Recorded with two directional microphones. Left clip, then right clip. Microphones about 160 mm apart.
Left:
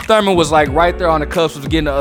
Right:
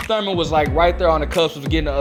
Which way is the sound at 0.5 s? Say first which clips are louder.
Even; 40° left (ahead or behind).